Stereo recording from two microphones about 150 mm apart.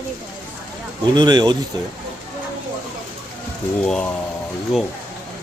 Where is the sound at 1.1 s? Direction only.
30° right (ahead or behind).